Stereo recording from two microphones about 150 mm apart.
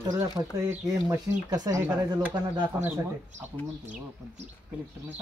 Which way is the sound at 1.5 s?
25° right (ahead or behind).